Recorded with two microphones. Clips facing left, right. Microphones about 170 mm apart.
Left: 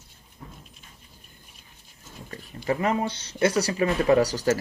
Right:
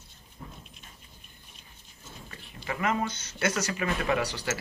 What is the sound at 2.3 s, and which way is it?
Speech, 35° left (ahead or behind).